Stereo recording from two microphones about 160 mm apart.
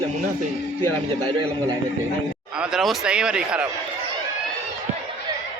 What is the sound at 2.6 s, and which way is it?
Speech, 5° right (ahead or behind).